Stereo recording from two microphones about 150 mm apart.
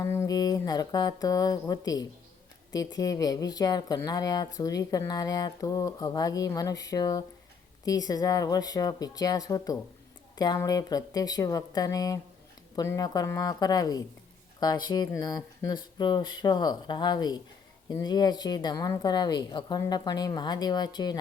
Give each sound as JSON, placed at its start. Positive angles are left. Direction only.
{"t": 0.0, "sound": "speech", "side_deg": 20}